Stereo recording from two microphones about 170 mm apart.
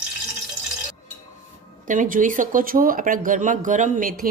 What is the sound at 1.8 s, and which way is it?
Speech, 50° right (ahead or behind).